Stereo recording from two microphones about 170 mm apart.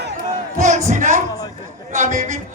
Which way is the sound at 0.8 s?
50° right (ahead or behind).